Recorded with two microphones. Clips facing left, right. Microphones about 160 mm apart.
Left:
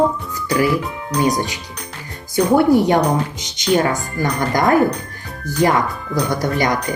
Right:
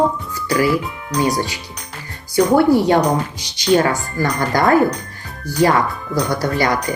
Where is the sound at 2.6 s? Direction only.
20° left (ahead or behind).